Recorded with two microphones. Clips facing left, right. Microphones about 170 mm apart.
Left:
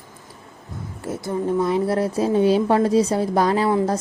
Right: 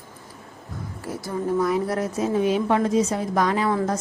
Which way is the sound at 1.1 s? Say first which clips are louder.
Left 3 dB; 25° left (ahead or behind).